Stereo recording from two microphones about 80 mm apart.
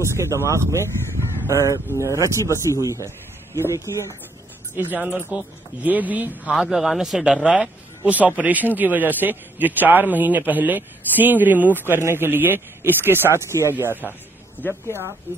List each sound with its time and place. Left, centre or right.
0.0 s a man's voice: right
4.7 s speech: right
6.5 s a man's voice: centre; by 14.1 s right